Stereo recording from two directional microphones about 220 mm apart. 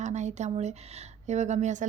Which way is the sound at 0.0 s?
30° right (ahead or behind).